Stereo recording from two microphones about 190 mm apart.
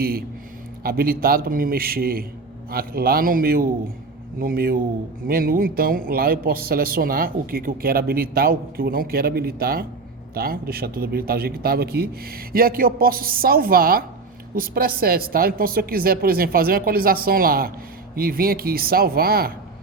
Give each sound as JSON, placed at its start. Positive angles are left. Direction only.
{"t": 0.8, "sound": "speech", "side_deg": -50}